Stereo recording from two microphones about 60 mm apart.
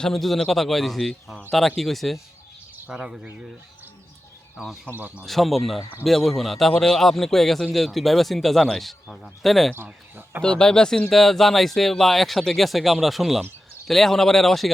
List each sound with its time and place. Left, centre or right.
0.0 s a man's voice: centre
2.9 s speech: centre
4.5 s speech: centre
4.9 s speech: right
5.2 s a man's voice: centre
9.7 s speech: right
10.4 s a man's voice: centre